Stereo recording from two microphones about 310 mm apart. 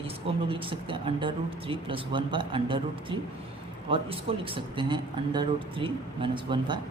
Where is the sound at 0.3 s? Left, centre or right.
Centre.